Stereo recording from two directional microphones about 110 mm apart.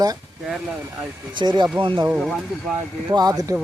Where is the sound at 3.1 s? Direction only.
35° right (ahead or behind).